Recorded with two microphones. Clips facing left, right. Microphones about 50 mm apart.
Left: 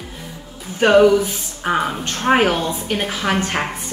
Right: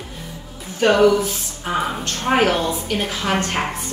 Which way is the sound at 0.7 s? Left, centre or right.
Centre.